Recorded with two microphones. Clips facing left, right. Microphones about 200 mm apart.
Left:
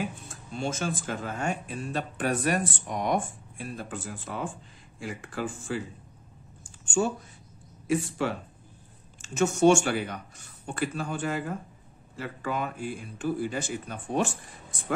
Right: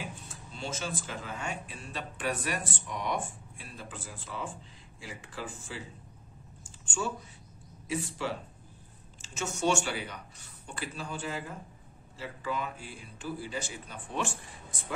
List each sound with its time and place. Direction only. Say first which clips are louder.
0.5 s speech: left 6 dB; 50° left (ahead or behind)
7.9 s speech: left 6 dB; 55° left (ahead or behind)